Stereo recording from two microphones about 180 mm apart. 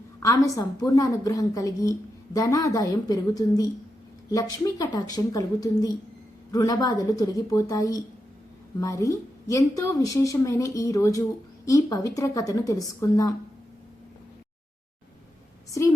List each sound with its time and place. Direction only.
0.2 s a woman's voice: 20° left (ahead or behind)